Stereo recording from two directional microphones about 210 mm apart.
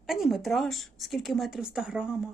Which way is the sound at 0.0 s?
Centre (ahead or behind).